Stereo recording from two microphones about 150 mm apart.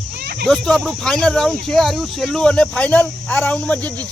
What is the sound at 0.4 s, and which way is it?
Speech, 5° left (ahead or behind).